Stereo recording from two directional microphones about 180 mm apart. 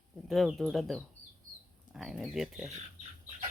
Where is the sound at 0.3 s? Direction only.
Centre (ahead or behind).